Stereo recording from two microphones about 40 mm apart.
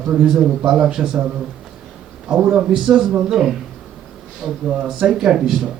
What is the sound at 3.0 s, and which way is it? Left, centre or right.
Speech, centre.